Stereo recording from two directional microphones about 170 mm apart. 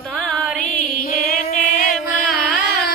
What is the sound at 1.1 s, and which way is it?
Chant, 55° left (ahead or behind).